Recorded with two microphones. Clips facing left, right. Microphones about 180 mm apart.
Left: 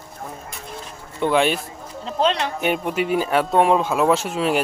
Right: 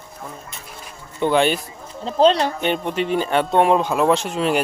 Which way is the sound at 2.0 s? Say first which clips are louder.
Right 5 dB; 35° right (ahead or behind).